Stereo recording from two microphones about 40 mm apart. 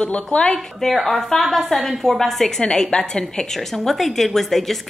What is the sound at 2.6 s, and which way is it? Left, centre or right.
Speech, centre.